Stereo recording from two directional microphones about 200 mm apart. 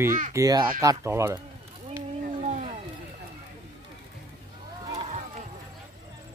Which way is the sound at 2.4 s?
35° right (ahead or behind).